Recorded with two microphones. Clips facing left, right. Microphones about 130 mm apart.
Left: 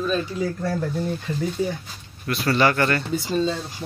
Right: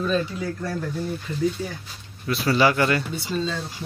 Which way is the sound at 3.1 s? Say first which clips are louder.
Left 4 dB; 40° left (ahead or behind).